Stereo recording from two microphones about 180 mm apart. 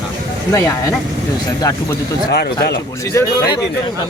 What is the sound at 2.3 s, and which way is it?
Speech, 65° left (ahead or behind).